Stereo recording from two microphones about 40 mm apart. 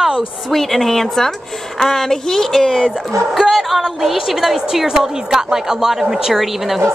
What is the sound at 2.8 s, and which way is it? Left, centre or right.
A woman's voice, centre.